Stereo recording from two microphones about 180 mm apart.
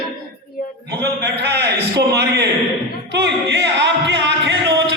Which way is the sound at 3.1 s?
75° right (ahead or behind).